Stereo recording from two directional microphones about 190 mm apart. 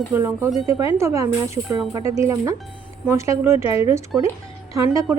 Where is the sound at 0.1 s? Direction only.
10° right (ahead or behind).